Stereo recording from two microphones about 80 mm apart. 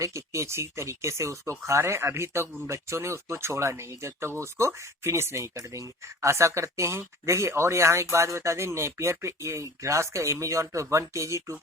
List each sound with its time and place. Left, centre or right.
0.0 s speech: right